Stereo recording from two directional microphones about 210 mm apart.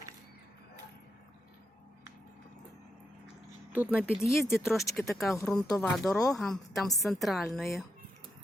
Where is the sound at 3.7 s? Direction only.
5° right (ahead or behind).